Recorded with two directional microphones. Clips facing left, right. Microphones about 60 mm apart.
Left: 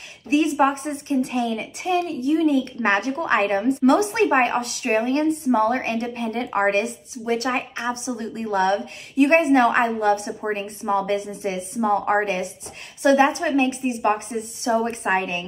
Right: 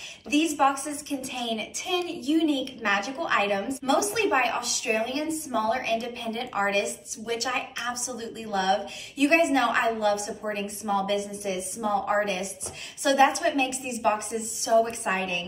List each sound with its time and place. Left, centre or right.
0.3 s speech: left